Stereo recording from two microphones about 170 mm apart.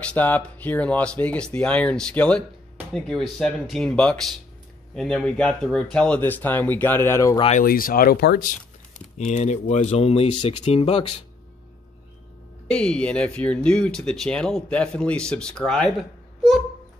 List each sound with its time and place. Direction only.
0.1 s speech: 10° left (ahead or behind)
7.6 s speech: 60° left (ahead or behind)
9.2 s speech: 45° left (ahead or behind)
12.6 s speech: 5° left (ahead or behind)